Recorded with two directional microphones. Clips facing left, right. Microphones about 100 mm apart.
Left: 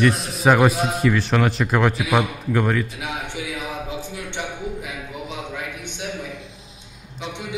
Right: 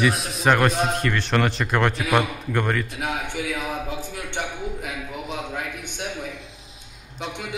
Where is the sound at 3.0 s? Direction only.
45° right (ahead or behind).